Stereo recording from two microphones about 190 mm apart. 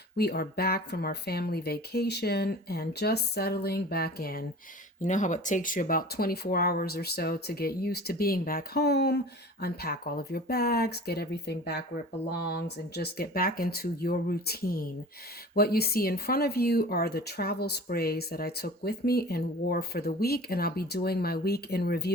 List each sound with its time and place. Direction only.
0.2 s speech: 55° left (ahead or behind)
5.0 s speech: 40° left (ahead or behind); by 22.1 s 55° left (ahead or behind)